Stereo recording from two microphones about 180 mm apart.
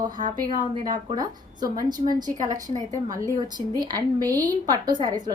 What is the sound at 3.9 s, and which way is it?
A woman's voice, 20° right (ahead or behind).